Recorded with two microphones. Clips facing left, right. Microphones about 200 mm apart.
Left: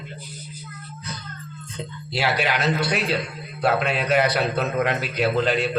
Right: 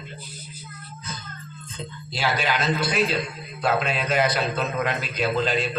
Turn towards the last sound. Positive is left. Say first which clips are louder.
# left 3 dB
turn(degrees=65)  # may be behind; listen again after turning